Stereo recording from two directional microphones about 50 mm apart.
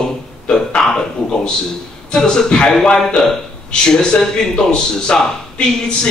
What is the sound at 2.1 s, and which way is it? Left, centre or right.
A man's voice, centre.